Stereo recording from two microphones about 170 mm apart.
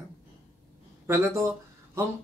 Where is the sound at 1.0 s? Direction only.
15° right (ahead or behind).